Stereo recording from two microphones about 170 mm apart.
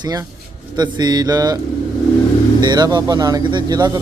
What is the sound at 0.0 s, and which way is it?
A man's voice, 20° right (ahead or behind).